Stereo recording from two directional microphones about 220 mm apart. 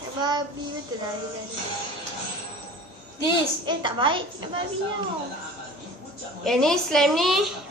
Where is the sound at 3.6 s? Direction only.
20° right (ahead or behind).